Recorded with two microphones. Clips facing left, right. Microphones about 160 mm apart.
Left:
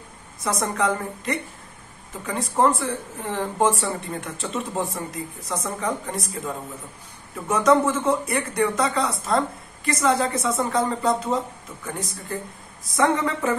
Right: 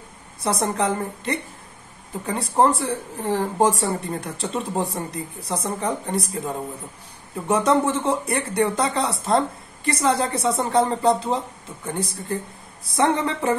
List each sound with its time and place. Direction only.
0.4 s a man's voice: 30° right (ahead or behind)